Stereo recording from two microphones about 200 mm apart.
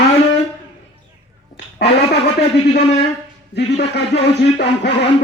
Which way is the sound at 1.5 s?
55° left (ahead or behind).